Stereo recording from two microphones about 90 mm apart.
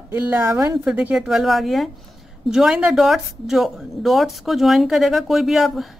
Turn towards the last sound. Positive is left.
turn(degrees=0)  # may be behind; listen again after turning